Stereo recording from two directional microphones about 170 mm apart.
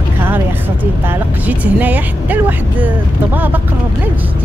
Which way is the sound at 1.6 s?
10° right (ahead or behind).